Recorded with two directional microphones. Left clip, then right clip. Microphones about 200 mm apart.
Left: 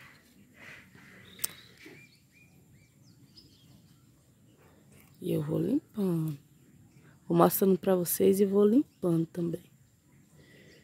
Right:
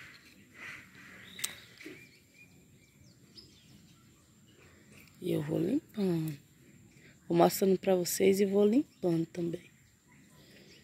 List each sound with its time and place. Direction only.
1.4 s a sound: 40° left (ahead or behind)
5.2 s speech: 25° left (ahead or behind)
7.2 s speech: 40° left (ahead or behind)